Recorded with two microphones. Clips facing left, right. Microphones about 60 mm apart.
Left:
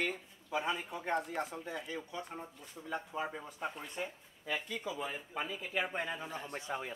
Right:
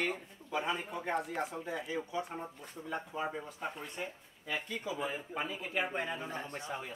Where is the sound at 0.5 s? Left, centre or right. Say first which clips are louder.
Right 1 dB; centre.